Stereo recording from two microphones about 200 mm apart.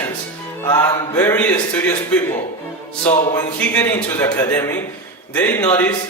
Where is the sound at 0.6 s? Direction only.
10° left (ahead or behind).